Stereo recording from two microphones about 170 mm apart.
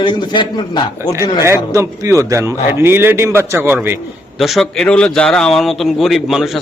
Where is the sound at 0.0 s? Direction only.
25° left (ahead or behind).